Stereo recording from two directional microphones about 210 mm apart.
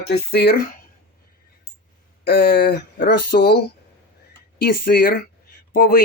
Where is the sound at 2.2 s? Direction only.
45° left (ahead or behind).